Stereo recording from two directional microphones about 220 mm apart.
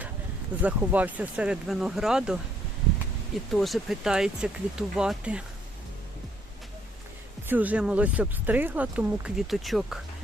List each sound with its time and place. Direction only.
0.6 s speech: 5° right (ahead or behind)
3.5 s speech: centre (ahead or behind)
7.4 s speech: 10° right (ahead or behind)